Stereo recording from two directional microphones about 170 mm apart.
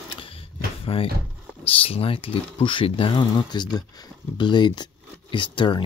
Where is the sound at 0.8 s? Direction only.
35° left (ahead or behind).